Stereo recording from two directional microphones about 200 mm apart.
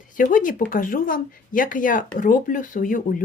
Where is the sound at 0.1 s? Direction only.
40° left (ahead or behind).